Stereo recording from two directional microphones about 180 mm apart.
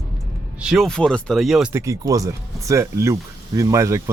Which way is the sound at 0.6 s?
Centre (ahead or behind).